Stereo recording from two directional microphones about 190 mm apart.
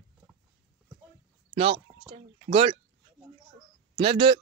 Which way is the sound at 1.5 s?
30° right (ahead or behind).